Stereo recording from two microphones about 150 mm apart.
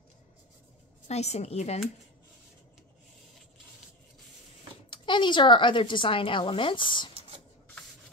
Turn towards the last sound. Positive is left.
turn(degrees=30)  # may be behind; listen again after turning